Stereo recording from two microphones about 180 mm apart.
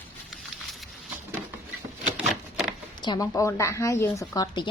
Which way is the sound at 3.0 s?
20° left (ahead or behind).